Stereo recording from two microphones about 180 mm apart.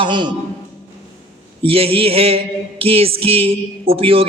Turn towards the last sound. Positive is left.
turn(degrees=-30)  # may be behind; listen again after turning